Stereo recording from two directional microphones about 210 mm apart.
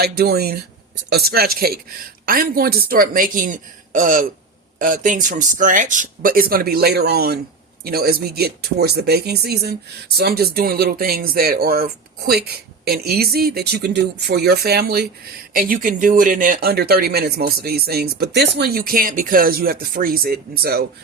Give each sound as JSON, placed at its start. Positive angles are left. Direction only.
{"t": 0.0, "sound": "speech", "side_deg": -50}